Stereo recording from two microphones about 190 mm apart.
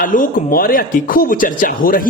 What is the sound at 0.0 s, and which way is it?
Speech, 45° left (ahead or behind).